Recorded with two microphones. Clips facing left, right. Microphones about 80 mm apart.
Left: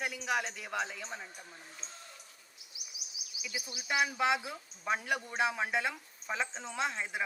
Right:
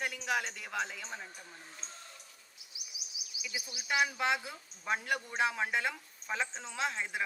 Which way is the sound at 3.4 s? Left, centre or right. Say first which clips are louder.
Even; left.